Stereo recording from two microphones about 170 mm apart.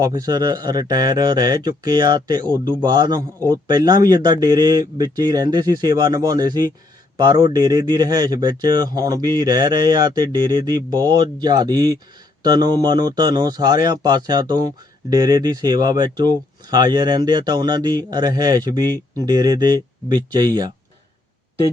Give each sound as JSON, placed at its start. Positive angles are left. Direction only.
{"t": 0.0, "sound": "a man's voice", "side_deg": -20}